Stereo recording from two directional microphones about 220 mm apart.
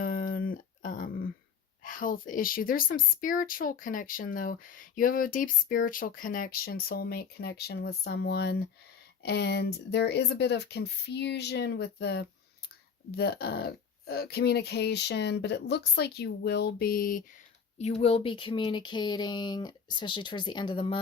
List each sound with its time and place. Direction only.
0.0 s a sound: 40° left (ahead or behind)
1.8 s speech: 40° left (ahead or behind)
17.7 s speech: 30° left (ahead or behind)